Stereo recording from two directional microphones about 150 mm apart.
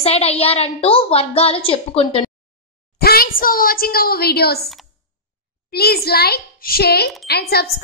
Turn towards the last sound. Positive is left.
turn(degrees=90)